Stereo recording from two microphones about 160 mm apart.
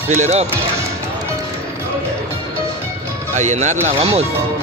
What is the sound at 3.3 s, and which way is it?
Speech, 50° right (ahead or behind).